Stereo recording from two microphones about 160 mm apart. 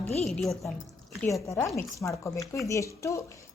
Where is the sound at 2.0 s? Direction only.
20° left (ahead or behind).